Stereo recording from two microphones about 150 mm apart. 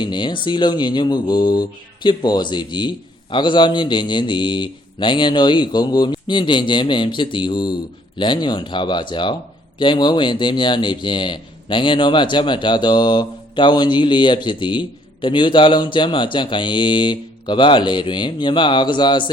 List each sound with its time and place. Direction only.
0.0 s speech: 30° left (ahead or behind)